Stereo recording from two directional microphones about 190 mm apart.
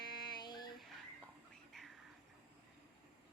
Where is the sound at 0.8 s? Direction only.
Centre (ahead or behind).